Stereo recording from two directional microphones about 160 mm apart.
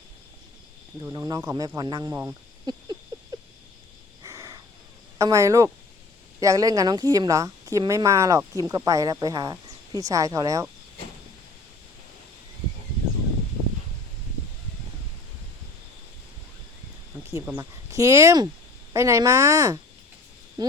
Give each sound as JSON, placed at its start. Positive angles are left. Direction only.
{"t": 1.0, "sound": "a woman's voice", "side_deg": -20}
{"t": 2.7, "sound": "a woman's voice", "side_deg": -25}
{"t": 4.2, "sound": "crow", "side_deg": -20}
{"t": 5.1, "sound": "a woman's voice", "side_deg": -20}
{"t": 17.4, "sound": "a woman's voice", "side_deg": -15}